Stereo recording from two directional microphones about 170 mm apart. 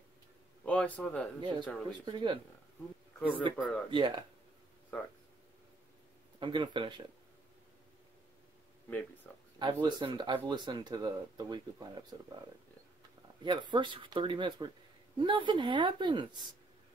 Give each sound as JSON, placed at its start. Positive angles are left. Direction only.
{"t": 0.7, "sound": "a man's voice", "side_deg": 10}
{"t": 1.4, "sound": "speech", "side_deg": -25}
{"t": 3.2, "sound": "speech", "side_deg": 10}
{"t": 3.5, "sound": "speech", "side_deg": -5}
{"t": 3.9, "sound": "speech", "side_deg": -30}
{"t": 6.4, "sound": "speech", "side_deg": -30}
{"t": 9.6, "sound": "speech", "side_deg": -25}
{"t": 13.4, "sound": "speech", "side_deg": -25}